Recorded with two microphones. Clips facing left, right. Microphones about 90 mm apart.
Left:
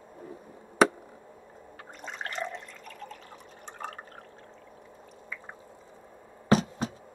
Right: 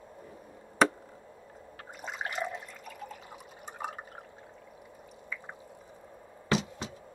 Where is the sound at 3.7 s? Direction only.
10° right (ahead or behind).